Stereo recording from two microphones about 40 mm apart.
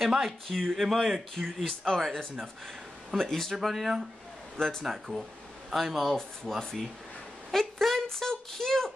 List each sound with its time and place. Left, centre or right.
0.0 s a man's voice: centre
0.5 s speech: centre
0.7 s speech: centre
1.3 s speech: centre
4.6 s speech: centre
4.8 s speech: centre
7.5 s speech: centre